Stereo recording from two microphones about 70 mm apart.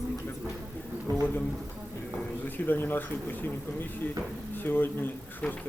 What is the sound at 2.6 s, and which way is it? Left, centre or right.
Speech, left.